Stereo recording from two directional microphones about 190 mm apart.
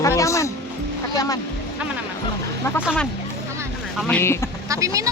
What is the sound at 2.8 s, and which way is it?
Speech, 5° left (ahead or behind).